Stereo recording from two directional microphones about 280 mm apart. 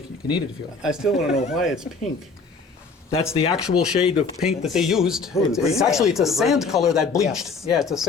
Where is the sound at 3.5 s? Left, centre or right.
Centre.